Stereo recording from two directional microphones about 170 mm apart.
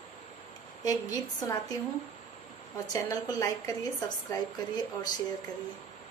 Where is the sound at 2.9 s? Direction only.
20° left (ahead or behind).